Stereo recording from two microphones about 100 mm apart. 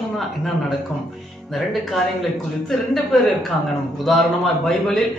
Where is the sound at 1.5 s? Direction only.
Centre (ahead or behind).